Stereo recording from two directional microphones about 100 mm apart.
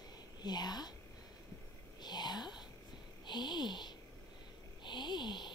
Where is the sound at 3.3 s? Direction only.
45° left (ahead or behind).